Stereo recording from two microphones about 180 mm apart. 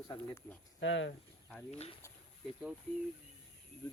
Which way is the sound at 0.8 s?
90° left.